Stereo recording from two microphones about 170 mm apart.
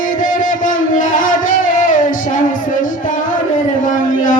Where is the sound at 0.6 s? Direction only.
50° left (ahead or behind).